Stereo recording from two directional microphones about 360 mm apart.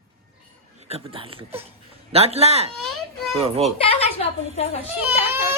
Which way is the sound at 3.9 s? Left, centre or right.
Centre.